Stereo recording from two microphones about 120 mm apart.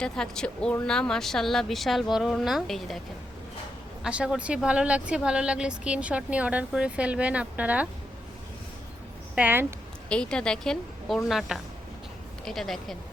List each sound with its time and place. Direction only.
0.0 s speech: 5° left (ahead or behind)
4.0 s speech: 10° right (ahead or behind)
9.3 s speech: 15° right (ahead or behind)
10.1 s a woman's voice: 5° left (ahead or behind)